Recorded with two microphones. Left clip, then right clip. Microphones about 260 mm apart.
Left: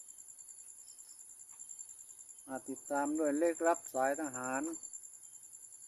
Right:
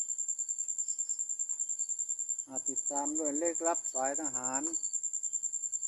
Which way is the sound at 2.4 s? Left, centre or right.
Centre.